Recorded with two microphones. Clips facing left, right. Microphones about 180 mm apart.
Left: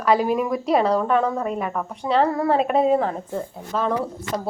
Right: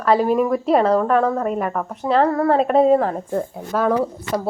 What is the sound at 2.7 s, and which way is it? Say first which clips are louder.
Speech: right 6 dB; 40° right (ahead or behind).